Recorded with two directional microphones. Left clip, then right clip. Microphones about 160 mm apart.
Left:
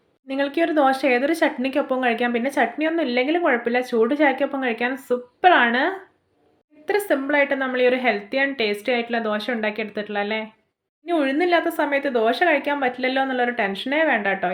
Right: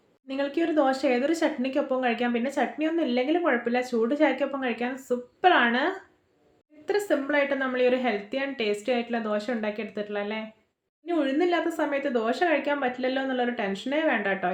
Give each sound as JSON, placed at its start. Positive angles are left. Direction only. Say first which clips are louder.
{"t": 0.3, "sound": "speech", "louder": "left 5 dB", "side_deg": 25}